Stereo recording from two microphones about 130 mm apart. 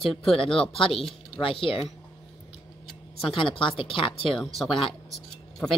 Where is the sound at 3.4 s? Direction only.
40° left (ahead or behind).